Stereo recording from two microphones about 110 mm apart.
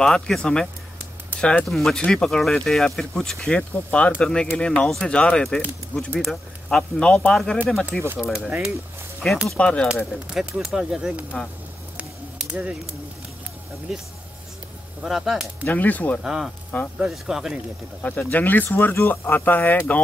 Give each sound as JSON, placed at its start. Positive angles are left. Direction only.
{"t": 0.0, "sound": "speech", "side_deg": 5}
{"t": 8.5, "sound": "speech", "side_deg": -10}
{"t": 9.2, "sound": "speech", "side_deg": 10}
{"t": 10.1, "sound": "speech", "side_deg": -5}
{"t": 12.0, "sound": "a sound", "side_deg": -10}
{"t": 13.9, "sound": "speech", "side_deg": -5}
{"t": 15.6, "sound": "speech", "side_deg": 15}
{"t": 16.2, "sound": "speech", "side_deg": -5}
{"t": 18.0, "sound": "speech", "side_deg": 15}